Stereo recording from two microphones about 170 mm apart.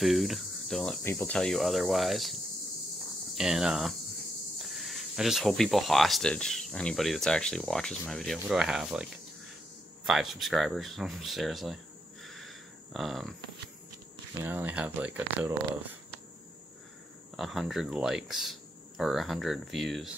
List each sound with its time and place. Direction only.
0.0 s cricket: centre (ahead or behind)
1.1 s speech: 5° left (ahead or behind)
14.4 s speech: 10° right (ahead or behind)
17.4 s speech: centre (ahead or behind)